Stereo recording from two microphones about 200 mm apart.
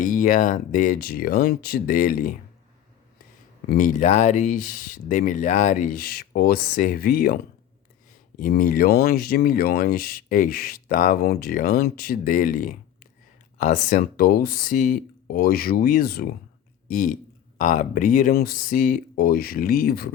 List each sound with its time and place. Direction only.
0.0 s speech: 40° left (ahead or behind)
3.7 s speech: 40° left (ahead or behind)